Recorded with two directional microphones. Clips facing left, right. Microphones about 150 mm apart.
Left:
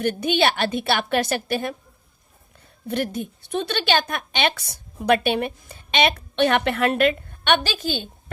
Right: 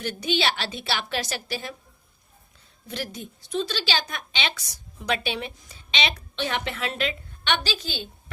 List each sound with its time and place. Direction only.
0.0 s a woman's voice: 55° left (ahead or behind)
2.8 s a woman's voice: 55° left (ahead or behind)